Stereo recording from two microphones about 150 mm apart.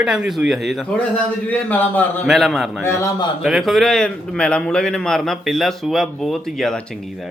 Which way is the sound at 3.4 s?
Centre (ahead or behind).